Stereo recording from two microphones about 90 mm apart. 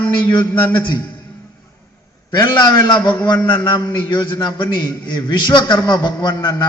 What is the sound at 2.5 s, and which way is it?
A man's voice, 55° left (ahead or behind).